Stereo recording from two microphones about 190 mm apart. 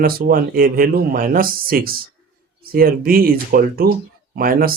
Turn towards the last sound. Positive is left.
turn(degrees=-50)  # may be behind; listen again after turning